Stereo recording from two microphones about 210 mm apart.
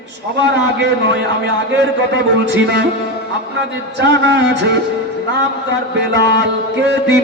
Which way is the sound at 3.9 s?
55° right (ahead or behind).